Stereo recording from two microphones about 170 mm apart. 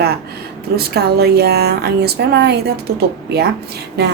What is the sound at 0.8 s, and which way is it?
A woman's voice, 70° right (ahead or behind).